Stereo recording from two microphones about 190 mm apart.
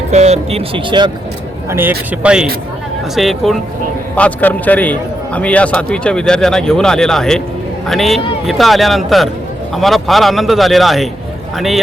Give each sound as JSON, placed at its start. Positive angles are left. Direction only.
{"t": 0.1, "sound": "speech", "side_deg": -35}
{"t": 1.7, "sound": "a man's voice", "side_deg": -10}